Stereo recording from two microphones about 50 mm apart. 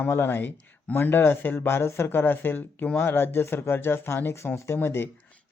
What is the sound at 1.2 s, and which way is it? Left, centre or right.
Speech, left.